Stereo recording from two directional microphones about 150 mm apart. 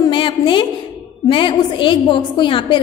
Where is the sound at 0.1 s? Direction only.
35° left (ahead or behind).